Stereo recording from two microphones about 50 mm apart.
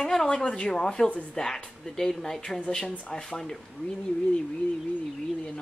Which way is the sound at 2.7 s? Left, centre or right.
Centre.